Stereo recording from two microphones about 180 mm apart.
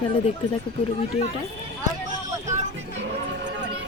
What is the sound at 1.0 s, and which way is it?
Speech, 35° left (ahead or behind).